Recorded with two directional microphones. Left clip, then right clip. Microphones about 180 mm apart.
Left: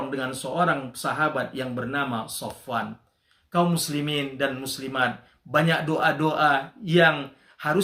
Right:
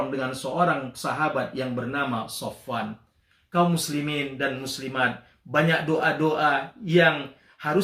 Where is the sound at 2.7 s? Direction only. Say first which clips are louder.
Left 3 dB; 20° left (ahead or behind).